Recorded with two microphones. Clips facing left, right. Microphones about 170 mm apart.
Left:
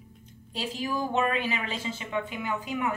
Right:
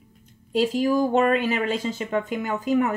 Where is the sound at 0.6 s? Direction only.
45° right (ahead or behind).